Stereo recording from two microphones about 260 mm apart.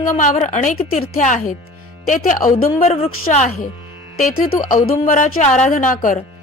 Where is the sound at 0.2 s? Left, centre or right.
Left.